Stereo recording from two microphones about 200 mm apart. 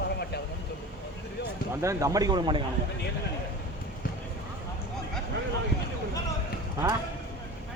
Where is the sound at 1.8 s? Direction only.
15° right (ahead or behind).